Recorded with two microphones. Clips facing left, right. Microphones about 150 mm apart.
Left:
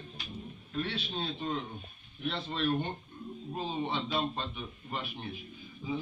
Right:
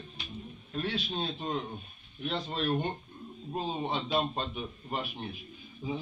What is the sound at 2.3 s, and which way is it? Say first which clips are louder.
Speech: right 1 dB; 40° right (ahead or behind).